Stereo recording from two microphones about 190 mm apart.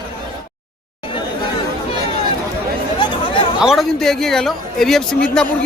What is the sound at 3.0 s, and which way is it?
Chatter, 25° left (ahead or behind).